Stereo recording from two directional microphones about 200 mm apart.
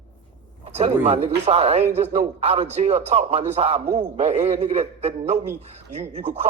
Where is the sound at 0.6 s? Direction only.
30° right (ahead or behind).